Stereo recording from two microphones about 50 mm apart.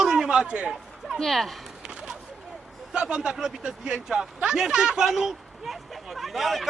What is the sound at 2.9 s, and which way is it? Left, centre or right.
Speech, centre.